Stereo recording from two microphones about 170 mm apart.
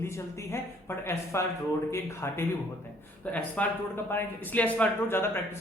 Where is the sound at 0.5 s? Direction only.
15° left (ahead or behind).